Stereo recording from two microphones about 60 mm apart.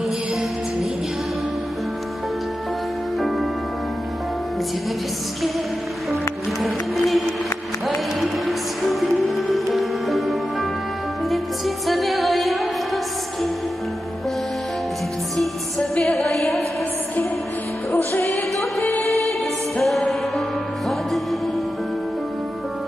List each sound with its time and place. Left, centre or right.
3.2 s music: centre
6.6 s music: centre
16.0 s a sound: centre
17.9 s music: left
19.8 s music: centre